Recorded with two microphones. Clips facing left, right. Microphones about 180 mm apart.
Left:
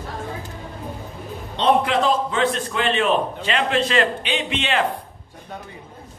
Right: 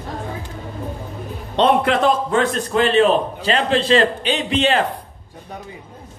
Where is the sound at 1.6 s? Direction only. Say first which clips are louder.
Right 3 dB; 55° right (ahead or behind); by 4.8 s 35° right (ahead or behind).